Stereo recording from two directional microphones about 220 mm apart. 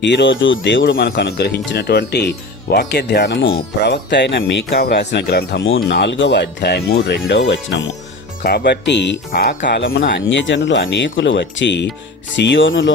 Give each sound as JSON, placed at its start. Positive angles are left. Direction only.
{"t": 0.0, "sound": "speech", "side_deg": 55}